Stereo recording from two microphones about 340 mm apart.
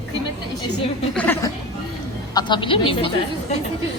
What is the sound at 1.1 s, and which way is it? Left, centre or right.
A woman's voice, centre.